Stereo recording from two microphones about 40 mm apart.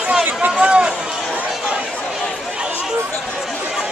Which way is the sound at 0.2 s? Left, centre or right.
Right.